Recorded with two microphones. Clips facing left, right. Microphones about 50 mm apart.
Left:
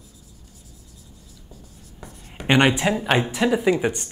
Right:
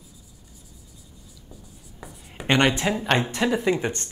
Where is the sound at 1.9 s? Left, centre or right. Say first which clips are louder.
Left 1 dB; centre.